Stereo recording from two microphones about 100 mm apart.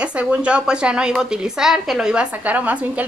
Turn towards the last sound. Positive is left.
turn(degrees=-15)  # may be behind; listen again after turning